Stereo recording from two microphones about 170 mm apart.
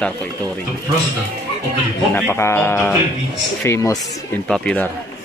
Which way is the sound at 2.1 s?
15° left (ahead or behind).